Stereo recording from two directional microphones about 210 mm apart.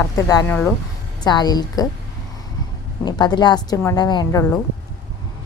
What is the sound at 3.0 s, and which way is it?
A woman's voice, 20° left (ahead or behind).